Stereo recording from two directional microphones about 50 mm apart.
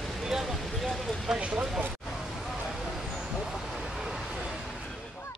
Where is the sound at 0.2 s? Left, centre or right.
Centre.